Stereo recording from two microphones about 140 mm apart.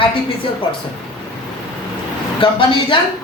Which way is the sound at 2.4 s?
35° left (ahead or behind).